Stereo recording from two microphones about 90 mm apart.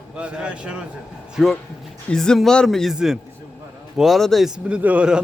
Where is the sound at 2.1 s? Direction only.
5° left (ahead or behind); by 5.2 s 10° right (ahead or behind).